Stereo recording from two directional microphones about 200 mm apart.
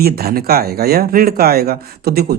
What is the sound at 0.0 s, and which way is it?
Speech, 50° right (ahead or behind).